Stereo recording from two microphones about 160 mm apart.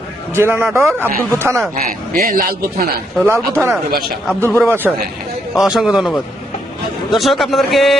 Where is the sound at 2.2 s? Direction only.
70° right (ahead or behind).